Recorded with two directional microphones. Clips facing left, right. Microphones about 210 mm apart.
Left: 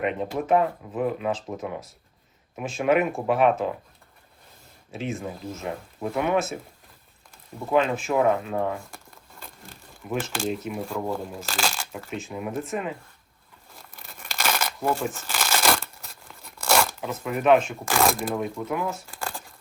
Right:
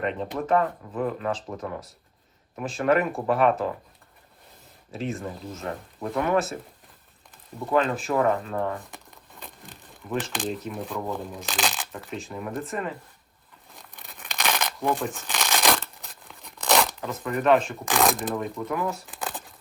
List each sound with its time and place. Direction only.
0.0 s speech: 10° left (ahead or behind)
5.1 s speech: 5° left (ahead or behind)
7.7 s speech: 10° left (ahead or behind)
10.1 s speech: 10° left (ahead or behind)
13.7 s crumpling: centre (ahead or behind)
17.7 s speech: centre (ahead or behind)